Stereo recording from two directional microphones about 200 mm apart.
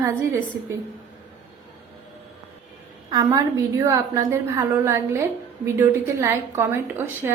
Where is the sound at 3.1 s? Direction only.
20° right (ahead or behind).